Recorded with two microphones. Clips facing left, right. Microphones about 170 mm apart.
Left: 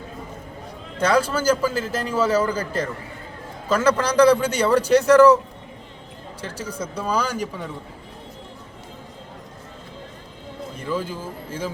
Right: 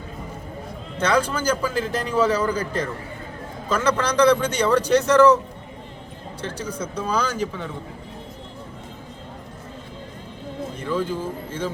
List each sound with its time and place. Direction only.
0.9 s a man's voice: 10° left (ahead or behind)
3.8 s a man's voice: 10° left (ahead or behind)
6.4 s a man's voice: 10° left (ahead or behind)
10.8 s a man's voice: 5° left (ahead or behind)